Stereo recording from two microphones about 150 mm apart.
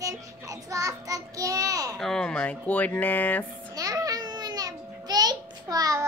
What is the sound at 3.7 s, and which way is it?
Babbling, 25° right (ahead or behind).